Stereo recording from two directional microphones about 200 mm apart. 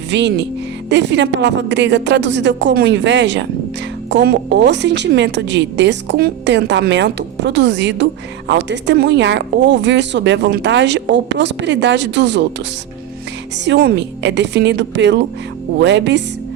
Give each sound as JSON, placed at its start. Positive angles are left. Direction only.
{"t": 0.1, "sound": "speech", "side_deg": -60}
{"t": 13.7, "sound": "speech", "side_deg": -55}